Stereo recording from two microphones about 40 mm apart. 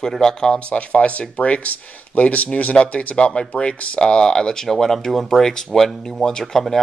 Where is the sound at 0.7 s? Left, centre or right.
Left.